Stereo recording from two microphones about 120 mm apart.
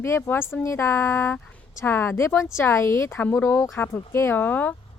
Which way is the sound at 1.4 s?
10° left (ahead or behind).